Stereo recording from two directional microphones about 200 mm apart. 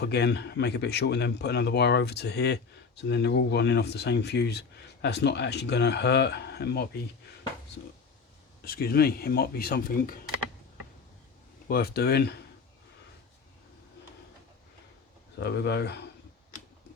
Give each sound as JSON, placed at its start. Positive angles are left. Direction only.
{"t": 0.0, "sound": "a man's voice", "side_deg": 55}
{"t": 8.6, "sound": "speech", "side_deg": 50}
{"t": 11.7, "sound": "speech", "side_deg": 50}
{"t": 15.4, "sound": "a man's voice", "side_deg": 55}